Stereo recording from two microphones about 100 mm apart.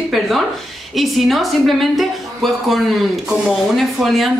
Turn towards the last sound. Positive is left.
turn(degrees=0)  # may be behind; listen again after turning